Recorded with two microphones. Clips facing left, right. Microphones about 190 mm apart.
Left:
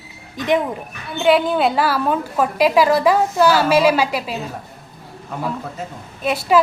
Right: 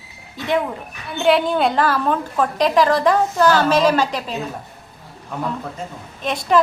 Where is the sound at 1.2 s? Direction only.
Centre (ahead or behind).